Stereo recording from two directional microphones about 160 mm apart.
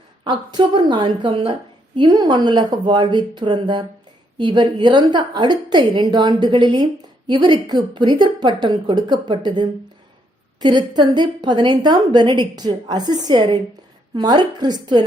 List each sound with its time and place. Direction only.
0.3 s a woman's voice: 30° right (ahead or behind)